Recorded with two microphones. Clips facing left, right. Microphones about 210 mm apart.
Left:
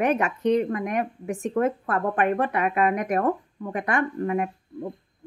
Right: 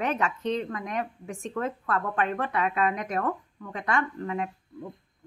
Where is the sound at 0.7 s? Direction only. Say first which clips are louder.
Left 6 dB; 50° left (ahead or behind).